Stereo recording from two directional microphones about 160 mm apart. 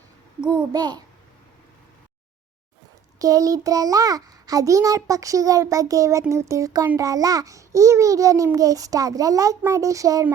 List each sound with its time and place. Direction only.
0.5 s a child's voice: 25° right (ahead or behind)
3.2 s a child's voice: 20° right (ahead or behind)